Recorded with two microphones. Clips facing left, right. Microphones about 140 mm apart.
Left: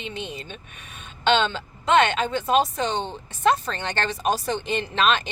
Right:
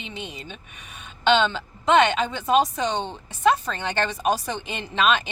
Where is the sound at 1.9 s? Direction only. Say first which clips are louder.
Right 1 dB; 15° right (ahead or behind).